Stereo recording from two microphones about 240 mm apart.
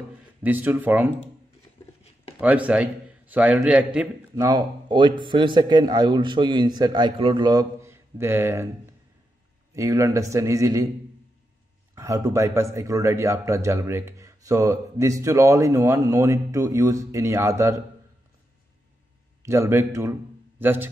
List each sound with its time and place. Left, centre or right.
0.4 s a man's voice: centre
2.4 s a man's voice: centre
4.5 s a man's voice: centre
9.8 s a man's voice: centre
11.9 s a man's voice: centre
19.4 s a man's voice: centre